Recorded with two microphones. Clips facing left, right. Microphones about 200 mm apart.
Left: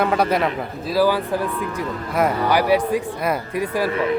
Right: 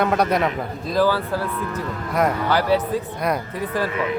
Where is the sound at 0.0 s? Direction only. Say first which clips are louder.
Even; centre (ahead or behind).